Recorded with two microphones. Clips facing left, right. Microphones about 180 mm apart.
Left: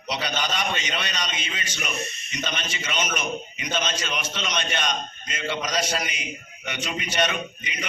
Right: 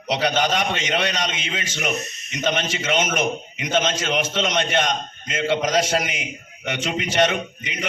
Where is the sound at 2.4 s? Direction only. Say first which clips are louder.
Right 10 dB; 55° right (ahead or behind).